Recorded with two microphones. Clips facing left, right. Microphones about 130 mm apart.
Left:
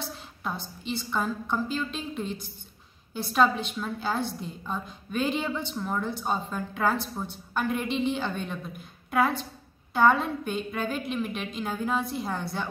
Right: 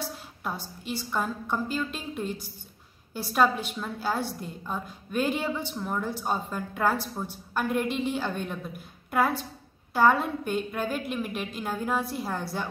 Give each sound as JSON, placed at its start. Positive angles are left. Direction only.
{"t": 0.4, "sound": "a woman's voice", "side_deg": -5}